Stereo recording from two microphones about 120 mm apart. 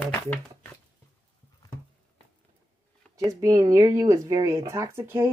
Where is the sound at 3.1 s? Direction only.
30° right (ahead or behind).